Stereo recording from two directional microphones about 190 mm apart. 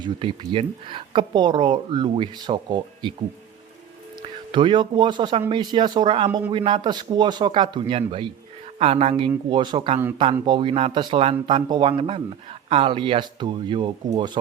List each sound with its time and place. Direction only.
0.0 s a woman's voice: 25° right (ahead or behind)
4.5 s a woman's voice: 25° right (ahead or behind)